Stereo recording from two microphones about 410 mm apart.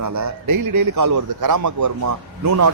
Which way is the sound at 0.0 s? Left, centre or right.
Right.